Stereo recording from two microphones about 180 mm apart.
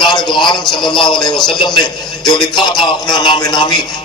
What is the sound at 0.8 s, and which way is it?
A man's voice, 25° left (ahead or behind).